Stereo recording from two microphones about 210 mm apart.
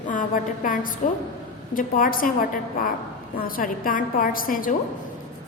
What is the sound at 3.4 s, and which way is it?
A woman's voice, 40° left (ahead or behind).